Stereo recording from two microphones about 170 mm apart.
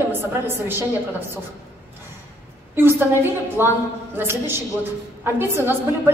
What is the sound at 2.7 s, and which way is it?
A woman's voice, 10° right (ahead or behind).